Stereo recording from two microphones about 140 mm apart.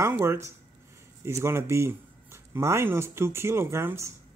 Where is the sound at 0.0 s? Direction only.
15° right (ahead or behind).